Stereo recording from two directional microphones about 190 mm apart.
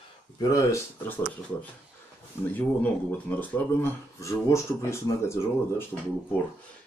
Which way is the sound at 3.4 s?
10° left (ahead or behind).